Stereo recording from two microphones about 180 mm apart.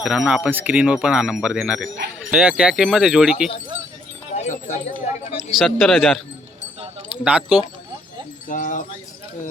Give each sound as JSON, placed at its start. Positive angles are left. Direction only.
{"t": 0.0, "sound": "speech", "side_deg": 0}
{"t": 4.4, "sound": "a sound", "side_deg": 40}
{"t": 5.5, "sound": "speech", "side_deg": 0}
{"t": 7.3, "sound": "speech", "side_deg": -5}
{"t": 8.4, "sound": "speech", "side_deg": 45}